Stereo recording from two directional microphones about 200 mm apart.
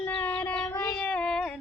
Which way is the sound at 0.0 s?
5° left (ahead or behind).